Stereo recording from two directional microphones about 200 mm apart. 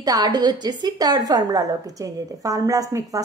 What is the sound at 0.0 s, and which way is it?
Speech, 20° right (ahead or behind).